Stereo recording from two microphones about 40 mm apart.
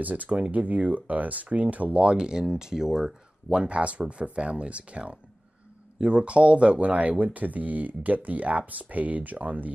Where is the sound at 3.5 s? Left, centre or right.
Right.